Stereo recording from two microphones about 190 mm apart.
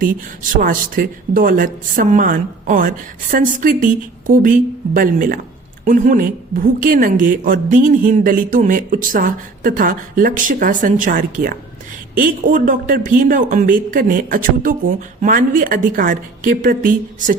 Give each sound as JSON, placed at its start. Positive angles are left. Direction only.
{"t": 0.6, "sound": "a woman's voice", "side_deg": -50}